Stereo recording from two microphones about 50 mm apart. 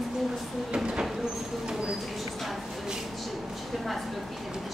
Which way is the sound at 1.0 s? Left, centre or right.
Centre.